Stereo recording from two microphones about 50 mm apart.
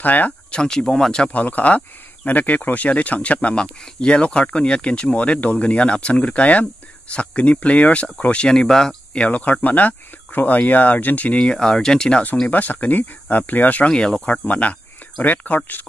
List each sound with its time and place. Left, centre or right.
0.0 s speech: left
0.5 s speech: centre
1.3 s speech: left
9.3 s speech: left
11.3 s speech: centre
12.4 s speech: left
13.9 s speech: centre
14.2 s speech: left